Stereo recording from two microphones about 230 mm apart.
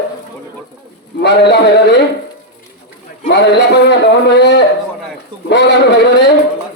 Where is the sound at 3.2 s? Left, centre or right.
Left.